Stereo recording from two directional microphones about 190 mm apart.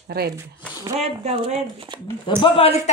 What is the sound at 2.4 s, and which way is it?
Speech, 30° left (ahead or behind).